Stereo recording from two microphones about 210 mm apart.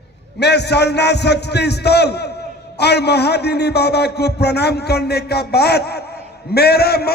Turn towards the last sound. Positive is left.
turn(degrees=50)  # may be behind; listen again after turning